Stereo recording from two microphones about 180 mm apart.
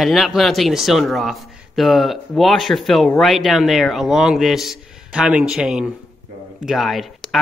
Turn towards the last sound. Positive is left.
turn(degrees=0)  # may be behind; listen again after turning